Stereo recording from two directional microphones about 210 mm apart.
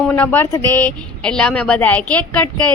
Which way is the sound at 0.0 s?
10° left (ahead or behind).